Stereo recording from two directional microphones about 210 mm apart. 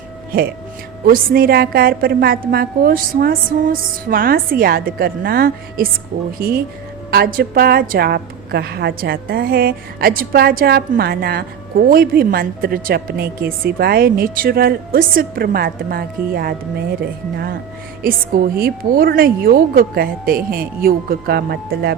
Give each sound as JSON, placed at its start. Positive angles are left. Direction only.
{"t": 1.0, "sound": "a woman's voice", "side_deg": -45}